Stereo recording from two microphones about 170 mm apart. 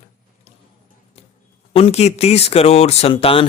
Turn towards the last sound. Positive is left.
turn(degrees=35)  # may be behind; listen again after turning